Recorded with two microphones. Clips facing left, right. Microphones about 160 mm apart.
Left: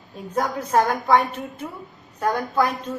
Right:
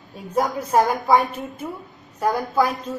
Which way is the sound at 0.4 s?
10° right (ahead or behind).